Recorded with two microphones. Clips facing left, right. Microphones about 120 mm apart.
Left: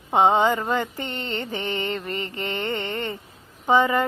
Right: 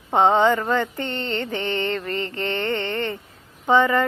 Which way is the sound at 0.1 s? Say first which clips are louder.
Right 1 dB; 15° left (ahead or behind).